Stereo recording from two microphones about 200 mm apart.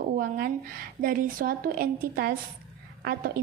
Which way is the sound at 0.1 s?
45° right (ahead or behind).